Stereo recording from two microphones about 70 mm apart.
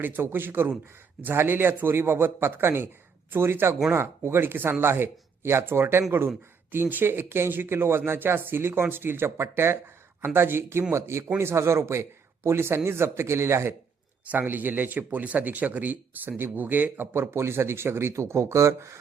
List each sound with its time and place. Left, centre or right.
0.0 s speech: right
14.3 s speech: right
17.3 s speech: right